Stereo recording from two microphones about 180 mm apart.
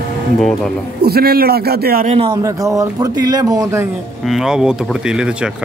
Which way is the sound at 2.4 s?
15° right (ahead or behind).